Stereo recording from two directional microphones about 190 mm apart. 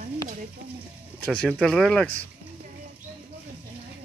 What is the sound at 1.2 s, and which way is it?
Speech, 5° left (ahead or behind).